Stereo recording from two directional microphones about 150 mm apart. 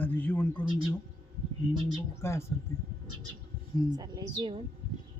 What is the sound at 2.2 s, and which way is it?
Speech, 20° left (ahead or behind).